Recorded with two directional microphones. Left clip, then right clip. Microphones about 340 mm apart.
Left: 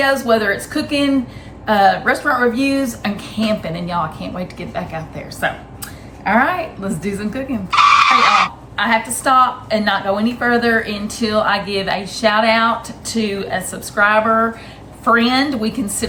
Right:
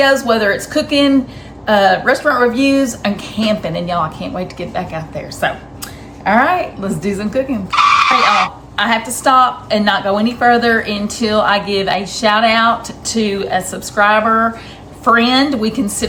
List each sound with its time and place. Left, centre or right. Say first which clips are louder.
0.0 s speech: right 3 dB; centre